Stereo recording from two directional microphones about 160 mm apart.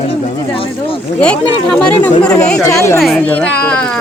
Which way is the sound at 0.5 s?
35° left (ahead or behind).